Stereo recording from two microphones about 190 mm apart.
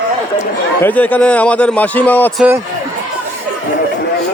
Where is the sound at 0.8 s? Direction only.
10° left (ahead or behind).